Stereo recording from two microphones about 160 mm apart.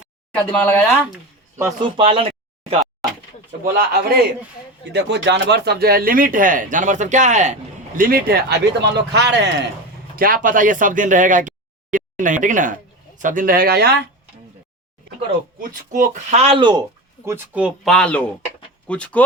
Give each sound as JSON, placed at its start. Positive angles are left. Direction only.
{"t": 0.3, "sound": "speech", "side_deg": 10}
{"t": 1.8, "sound": "speech", "side_deg": -35}
{"t": 3.6, "sound": "speech", "side_deg": -75}
{"t": 4.9, "sound": "speech", "side_deg": -90}
{"t": 10.2, "sound": "speech", "side_deg": -60}
{"t": 15.9, "sound": "speech", "side_deg": -45}
{"t": 17.2, "sound": "speech", "side_deg": -10}